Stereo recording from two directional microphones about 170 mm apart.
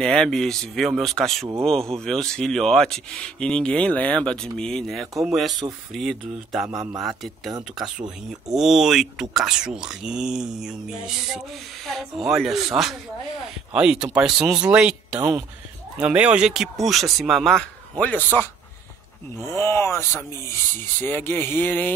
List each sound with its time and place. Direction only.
0.0 s speech: 5° left (ahead or behind)
6.7 s a man's voice: 20° right (ahead or behind)
8.5 s speech: centre (ahead or behind)
15.1 s a man's voice: 20° right (ahead or behind)
16.0 s speech: 5° right (ahead or behind); by 21.9 s 10° left (ahead or behind)